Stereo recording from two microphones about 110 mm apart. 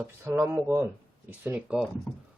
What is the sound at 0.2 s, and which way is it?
Speech, 20° right (ahead or behind).